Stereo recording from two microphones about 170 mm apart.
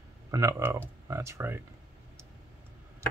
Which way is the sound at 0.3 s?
20° right (ahead or behind).